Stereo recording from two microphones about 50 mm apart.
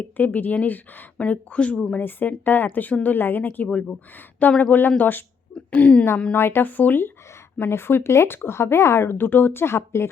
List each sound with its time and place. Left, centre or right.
0.0 s speech: left
2.0 s speech: left
3.7 s speech: left
4.4 s speech: left
5.7 s speech: left
6.3 s speech: left
6.7 s speech: left
7.6 s speech: left
9.0 s speech: left